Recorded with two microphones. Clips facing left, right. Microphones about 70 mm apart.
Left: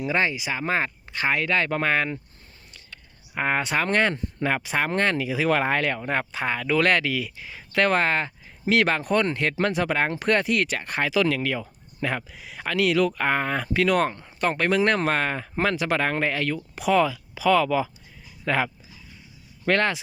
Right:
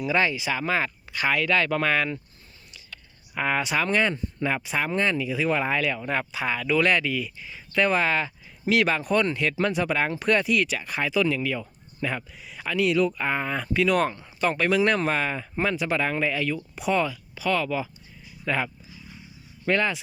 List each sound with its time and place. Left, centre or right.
0.0 s speech: left
6.0 s speech: left
16.7 s speech: left
18.4 s speech: left